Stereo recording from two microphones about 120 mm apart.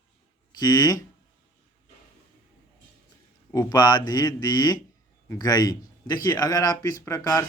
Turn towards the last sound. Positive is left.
turn(degrees=25)  # may be behind; listen again after turning